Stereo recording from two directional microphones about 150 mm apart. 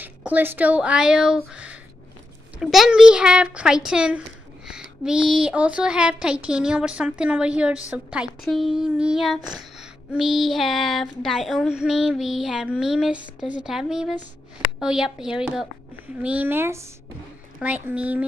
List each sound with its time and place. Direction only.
0.0 s speech: 10° right (ahead or behind)
1.5 s a sound: 10° right (ahead or behind)
2.6 s speech: 5° right (ahead or behind)